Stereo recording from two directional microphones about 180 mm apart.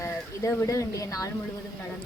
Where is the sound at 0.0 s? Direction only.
15° left (ahead or behind).